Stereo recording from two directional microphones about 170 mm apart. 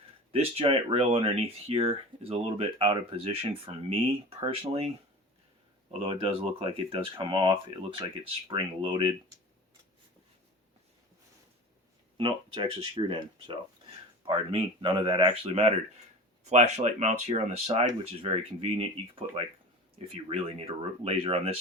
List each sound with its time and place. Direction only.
0.3 s speech: 35° right (ahead or behind)
5.9 s speech: 35° right (ahead or behind)
12.1 s speech: 25° right (ahead or behind)
14.3 s speech: 30° right (ahead or behind)
20.3 s speech: 35° right (ahead or behind)